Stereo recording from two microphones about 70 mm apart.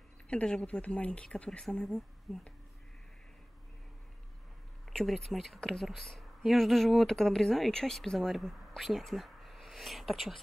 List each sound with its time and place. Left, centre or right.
0.3 s speech: centre
4.9 s speech: centre